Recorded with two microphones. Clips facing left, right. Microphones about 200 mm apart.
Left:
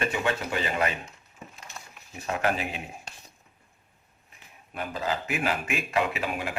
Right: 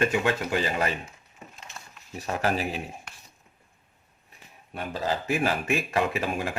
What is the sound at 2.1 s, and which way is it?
Speech, 35° right (ahead or behind).